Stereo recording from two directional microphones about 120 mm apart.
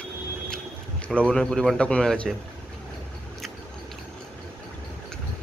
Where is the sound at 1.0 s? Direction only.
10° left (ahead or behind).